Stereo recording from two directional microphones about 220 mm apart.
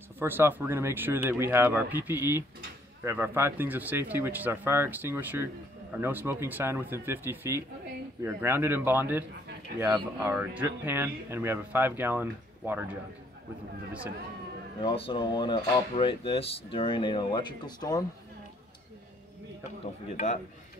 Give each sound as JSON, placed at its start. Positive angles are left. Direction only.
{"t": 0.2, "sound": "speech", "side_deg": -10}
{"t": 14.8, "sound": "speech", "side_deg": 25}